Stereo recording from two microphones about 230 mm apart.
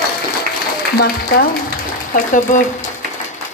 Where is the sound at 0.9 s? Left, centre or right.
Left.